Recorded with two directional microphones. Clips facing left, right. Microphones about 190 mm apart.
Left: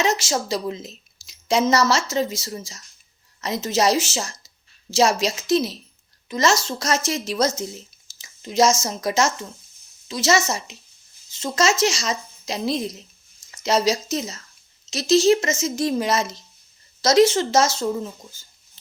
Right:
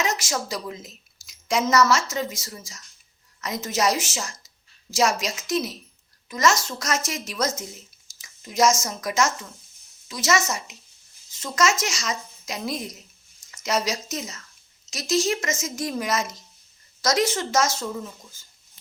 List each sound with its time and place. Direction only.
0.0 s a woman's voice: 25° left (ahead or behind)
8.2 s a sound: 25° left (ahead or behind)
8.8 s speech: 30° left (ahead or behind)